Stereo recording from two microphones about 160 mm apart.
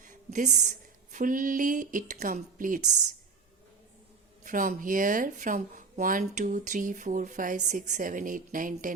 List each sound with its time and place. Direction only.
0.0 s speech: 55° right (ahead or behind)
4.4 s speech: 55° right (ahead or behind)